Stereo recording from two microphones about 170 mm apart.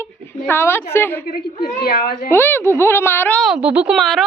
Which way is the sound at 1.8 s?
65° left (ahead or behind).